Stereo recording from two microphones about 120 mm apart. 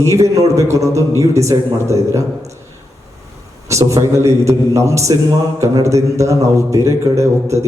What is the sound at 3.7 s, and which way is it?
A man's voice, 25° right (ahead or behind).